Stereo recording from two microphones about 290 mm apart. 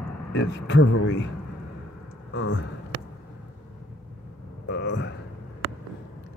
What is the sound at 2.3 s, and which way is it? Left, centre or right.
Speech, left.